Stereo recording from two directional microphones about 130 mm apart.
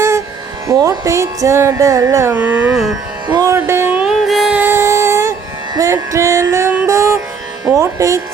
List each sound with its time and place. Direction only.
0.7 s speech: 30° right (ahead or behind)
2.3 s carnatic music: 15° right (ahead or behind)
3.2 s music: 30° right (ahead or behind)
4.0 s music: centre (ahead or behind); by 7.2 s 25° right (ahead or behind)
7.6 s speech: 25° right (ahead or behind)